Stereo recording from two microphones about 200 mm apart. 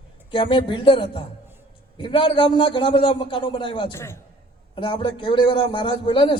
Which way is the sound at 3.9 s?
15° left (ahead or behind).